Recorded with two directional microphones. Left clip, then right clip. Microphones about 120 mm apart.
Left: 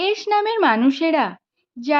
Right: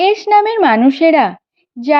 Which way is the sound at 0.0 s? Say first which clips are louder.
Right 9 dB; 35° right (ahead or behind).